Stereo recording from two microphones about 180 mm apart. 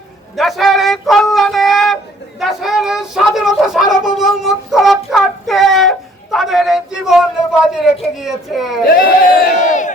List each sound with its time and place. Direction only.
0.3 s a sound: centre (ahead or behind)
8.2 s speech: centre (ahead or behind)
8.9 s crowd: 55° left (ahead or behind)